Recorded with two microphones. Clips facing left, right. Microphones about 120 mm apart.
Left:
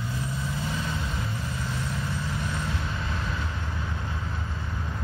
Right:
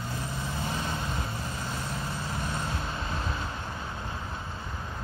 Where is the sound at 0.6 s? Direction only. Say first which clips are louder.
Left 1 dB; 35° right (ahead or behind).